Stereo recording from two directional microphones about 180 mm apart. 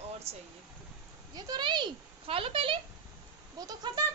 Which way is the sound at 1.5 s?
25° right (ahead or behind).